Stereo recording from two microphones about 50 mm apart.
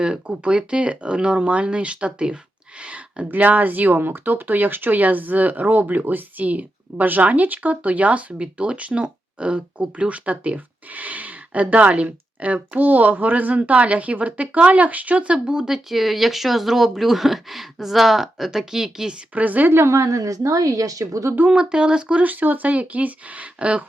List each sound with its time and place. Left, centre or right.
0.0 s speech: right
2.8 s a sound: right
3.2 s speech: right; by 19.1 s centre
19.3 s speech: right
19.7 s a woman's voice: right
21.5 s speech: centre
22.2 s speech: right